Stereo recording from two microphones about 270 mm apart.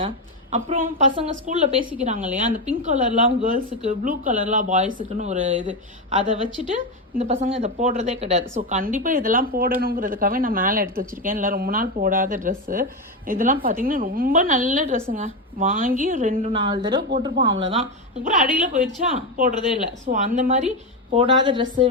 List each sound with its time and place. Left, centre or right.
0.5 s a woman's voice: right